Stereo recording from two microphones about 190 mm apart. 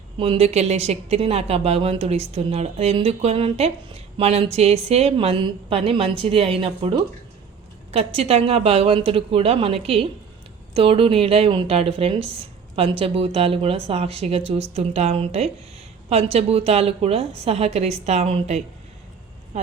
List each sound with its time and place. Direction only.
0.2 s a woman's voice: 30° right (ahead or behind)